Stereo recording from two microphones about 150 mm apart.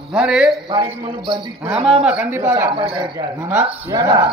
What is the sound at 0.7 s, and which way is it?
Speech, 30° right (ahead or behind).